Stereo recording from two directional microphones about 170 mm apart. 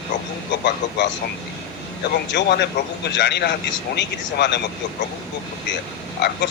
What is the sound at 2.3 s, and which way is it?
Speech, 90° left.